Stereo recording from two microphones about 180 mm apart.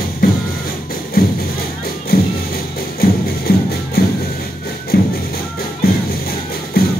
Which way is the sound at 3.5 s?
55° left (ahead or behind).